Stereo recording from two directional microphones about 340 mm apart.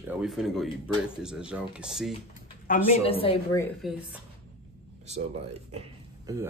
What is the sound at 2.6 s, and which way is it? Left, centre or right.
A woman's voice, left.